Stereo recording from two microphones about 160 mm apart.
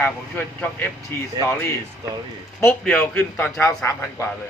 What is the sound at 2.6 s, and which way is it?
Speech, 10° left (ahead or behind).